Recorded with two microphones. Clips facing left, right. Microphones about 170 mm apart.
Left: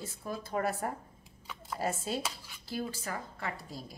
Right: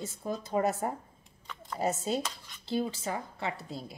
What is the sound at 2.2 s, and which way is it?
Speech, 5° left (ahead or behind).